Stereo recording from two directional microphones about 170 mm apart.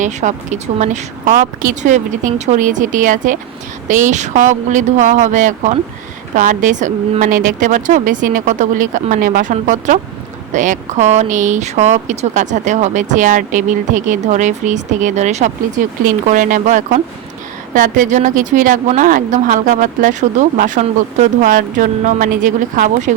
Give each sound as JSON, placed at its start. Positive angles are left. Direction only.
{"t": 0.0, "sound": "speech", "side_deg": -45}